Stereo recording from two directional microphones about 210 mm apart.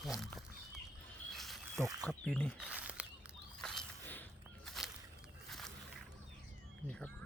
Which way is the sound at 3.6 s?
5° left (ahead or behind).